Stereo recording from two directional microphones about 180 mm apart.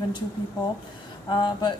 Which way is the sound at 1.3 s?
25° left (ahead or behind).